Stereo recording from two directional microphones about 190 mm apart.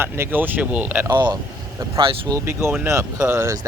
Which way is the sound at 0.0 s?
10° right (ahead or behind).